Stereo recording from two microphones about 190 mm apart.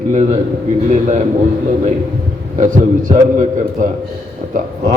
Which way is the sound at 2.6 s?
45° right (ahead or behind).